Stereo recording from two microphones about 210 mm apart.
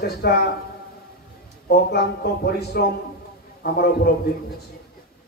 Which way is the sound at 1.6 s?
50° left (ahead or behind).